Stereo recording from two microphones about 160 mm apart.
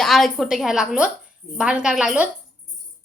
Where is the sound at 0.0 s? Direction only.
Centre (ahead or behind).